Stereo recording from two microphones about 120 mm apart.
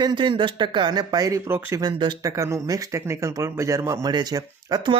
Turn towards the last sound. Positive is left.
turn(degrees=-30)  # may be behind; listen again after turning